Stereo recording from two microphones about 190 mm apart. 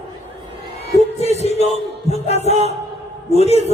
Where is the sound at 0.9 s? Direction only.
35° left (ahead or behind).